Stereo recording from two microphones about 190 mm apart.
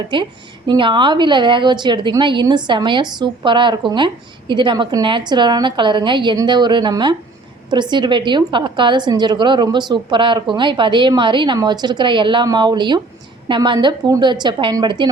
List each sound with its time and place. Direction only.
0.7 s a woman's voice: 25° right (ahead or behind)